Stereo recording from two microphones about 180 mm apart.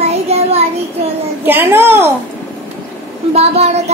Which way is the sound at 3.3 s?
35° right (ahead or behind).